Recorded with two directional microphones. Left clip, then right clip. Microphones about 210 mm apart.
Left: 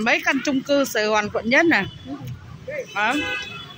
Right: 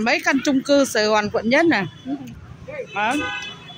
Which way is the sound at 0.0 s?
15° right (ahead or behind).